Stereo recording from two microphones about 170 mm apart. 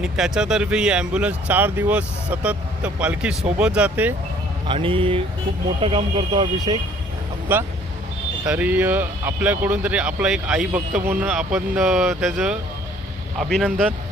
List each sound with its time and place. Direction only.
0.0 s speech: 5° right (ahead or behind)
4.7 s speech: 30° right (ahead or behind)
7.5 s speech: 10° right (ahead or behind)